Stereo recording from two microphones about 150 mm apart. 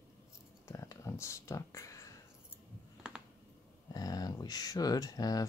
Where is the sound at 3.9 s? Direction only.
25° left (ahead or behind).